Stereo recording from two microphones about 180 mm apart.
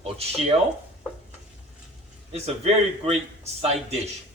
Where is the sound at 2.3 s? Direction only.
35° right (ahead or behind).